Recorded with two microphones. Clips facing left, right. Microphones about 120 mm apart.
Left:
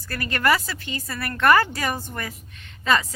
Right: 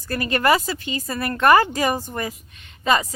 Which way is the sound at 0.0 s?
20° right (ahead or behind).